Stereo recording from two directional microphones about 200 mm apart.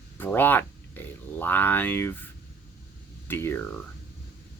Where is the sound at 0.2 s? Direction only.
10° left (ahead or behind).